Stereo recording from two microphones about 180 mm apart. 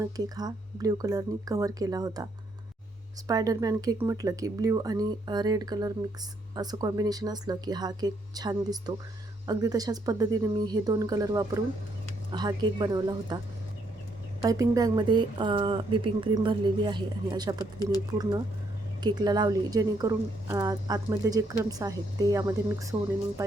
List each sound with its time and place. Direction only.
0.0 s a woman's voice: 20° right (ahead or behind)
3.2 s a woman's voice: 20° right (ahead or behind)
14.4 s a woman's voice: 20° right (ahead or behind)
19.0 s a woman's voice: 20° right (ahead or behind)